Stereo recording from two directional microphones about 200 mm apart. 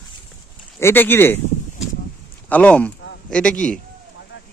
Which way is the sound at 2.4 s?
10° left (ahead or behind).